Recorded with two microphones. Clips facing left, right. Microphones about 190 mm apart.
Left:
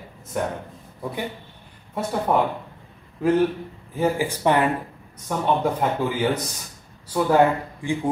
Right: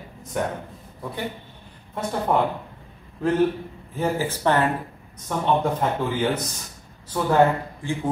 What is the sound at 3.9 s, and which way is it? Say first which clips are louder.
Speech: left 2 dB; 10° left (ahead or behind).